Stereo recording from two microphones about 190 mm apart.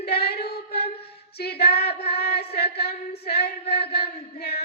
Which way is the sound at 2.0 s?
55° left (ahead or behind).